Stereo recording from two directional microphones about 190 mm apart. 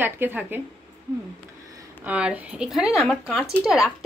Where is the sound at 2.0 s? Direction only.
5° right (ahead or behind).